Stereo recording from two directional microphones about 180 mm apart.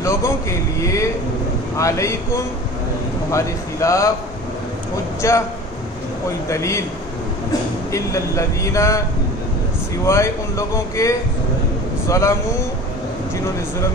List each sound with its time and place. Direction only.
0.0 s a man's voice: 15° left (ahead or behind)
5.2 s a man's voice: 15° left (ahead or behind)
7.9 s a man's voice: 15° left (ahead or behind)
10.0 s a man's voice: 15° left (ahead or behind)